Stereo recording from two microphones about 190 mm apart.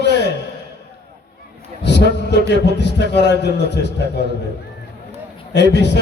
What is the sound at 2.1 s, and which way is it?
A man's voice, 65° left (ahead or behind).